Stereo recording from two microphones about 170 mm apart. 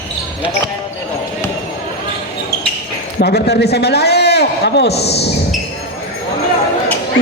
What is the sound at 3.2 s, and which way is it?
A man's voice, 70° left (ahead or behind).